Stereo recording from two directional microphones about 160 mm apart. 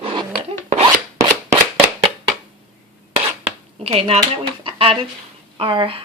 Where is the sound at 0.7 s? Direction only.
45° right (ahead or behind).